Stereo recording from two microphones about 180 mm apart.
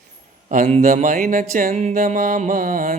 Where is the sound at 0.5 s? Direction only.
45° right (ahead or behind).